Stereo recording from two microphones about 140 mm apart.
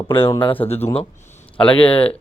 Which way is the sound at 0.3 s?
35° left (ahead or behind).